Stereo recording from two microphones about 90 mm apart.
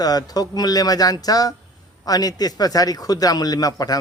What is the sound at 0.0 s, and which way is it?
A man's voice, 45° left (ahead or behind).